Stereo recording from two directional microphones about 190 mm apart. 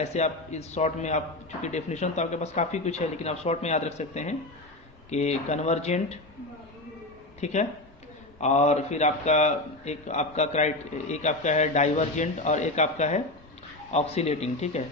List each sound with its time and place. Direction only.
0.0 s speech: 35° left (ahead or behind)
7.4 s speech: 35° left (ahead or behind)